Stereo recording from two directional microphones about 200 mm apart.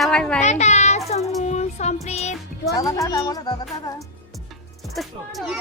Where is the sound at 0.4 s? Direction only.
35° left (ahead or behind).